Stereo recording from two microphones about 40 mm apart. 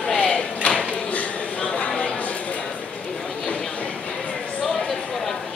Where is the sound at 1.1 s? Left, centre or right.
Left.